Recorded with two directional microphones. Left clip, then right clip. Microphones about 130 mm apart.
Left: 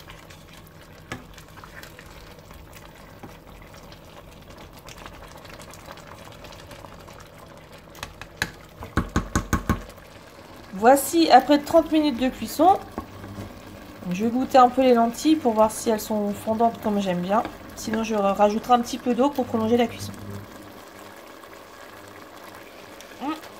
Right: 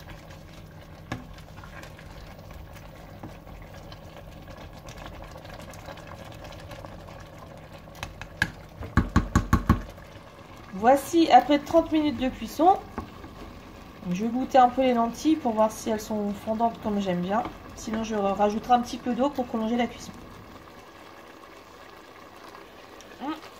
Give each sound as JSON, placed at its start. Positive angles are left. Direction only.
{"t": 10.8, "sound": "a woman's voice", "side_deg": 30}
{"t": 14.1, "sound": "a woman's voice", "side_deg": 30}
{"t": 23.2, "sound": "a sound", "side_deg": 25}